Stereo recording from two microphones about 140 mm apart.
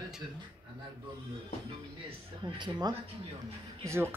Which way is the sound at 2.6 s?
30° right (ahead or behind).